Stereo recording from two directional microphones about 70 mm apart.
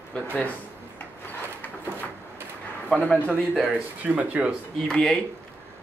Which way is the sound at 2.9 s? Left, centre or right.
Left.